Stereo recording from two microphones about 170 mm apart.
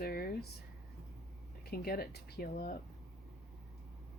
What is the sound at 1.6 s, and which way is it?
Speech, 65° left (ahead or behind).